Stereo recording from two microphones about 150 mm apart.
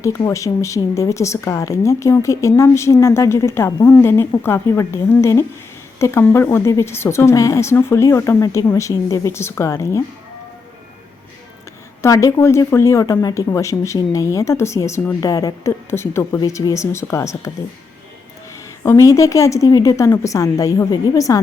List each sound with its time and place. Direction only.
0.3 s a woman's voice: 20° left (ahead or behind)
12.0 s speech: 20° left (ahead or behind)
18.8 s speech: 20° left (ahead or behind)